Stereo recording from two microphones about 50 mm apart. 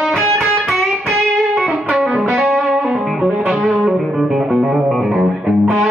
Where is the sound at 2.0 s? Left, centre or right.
Centre.